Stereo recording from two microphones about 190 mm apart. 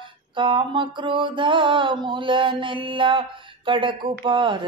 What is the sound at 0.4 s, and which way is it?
Mantra, 25° right (ahead or behind).